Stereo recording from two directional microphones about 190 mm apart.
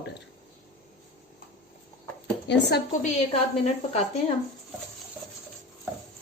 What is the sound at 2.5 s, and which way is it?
Speech, 60° left (ahead or behind).